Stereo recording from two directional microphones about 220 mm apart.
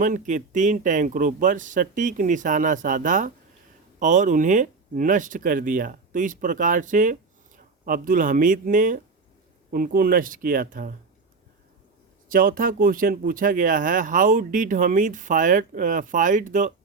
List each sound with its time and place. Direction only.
0.0 s speech: 35° right (ahead or behind)
12.3 s speech: 40° right (ahead or behind)